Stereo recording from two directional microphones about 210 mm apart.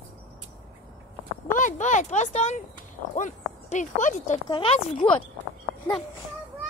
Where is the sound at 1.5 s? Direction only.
35° left (ahead or behind).